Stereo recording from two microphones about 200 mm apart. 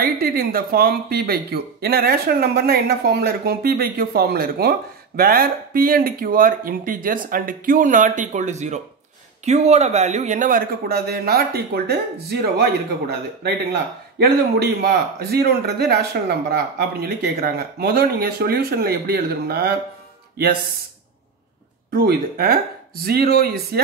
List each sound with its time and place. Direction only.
0.0 s speech: 45° right (ahead or behind)
14.1 s speech: 55° right (ahead or behind)
21.9 s speech: 50° right (ahead or behind)